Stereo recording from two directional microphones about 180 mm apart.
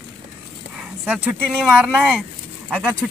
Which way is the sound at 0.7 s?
5° right (ahead or behind).